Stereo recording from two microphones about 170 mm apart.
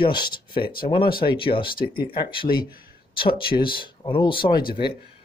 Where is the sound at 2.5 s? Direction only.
60° left (ahead or behind).